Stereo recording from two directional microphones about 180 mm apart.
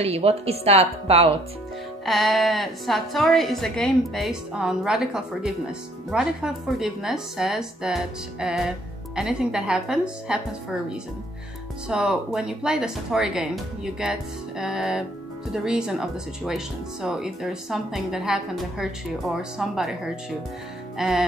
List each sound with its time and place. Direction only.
0.0 s speech: 35° right (ahead or behind)
2.0 s a woman's voice: centre (ahead or behind)
11.9 s a woman's voice: 5° right (ahead or behind)